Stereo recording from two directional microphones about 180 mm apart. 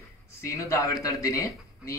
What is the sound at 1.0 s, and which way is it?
Speech, 20° left (ahead or behind).